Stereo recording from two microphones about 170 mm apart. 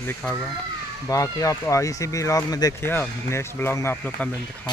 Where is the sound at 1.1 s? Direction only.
20° left (ahead or behind).